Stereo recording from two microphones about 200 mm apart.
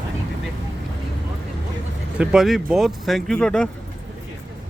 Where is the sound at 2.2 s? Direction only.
Centre (ahead or behind).